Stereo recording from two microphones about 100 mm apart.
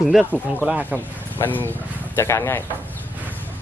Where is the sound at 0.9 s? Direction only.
20° left (ahead or behind).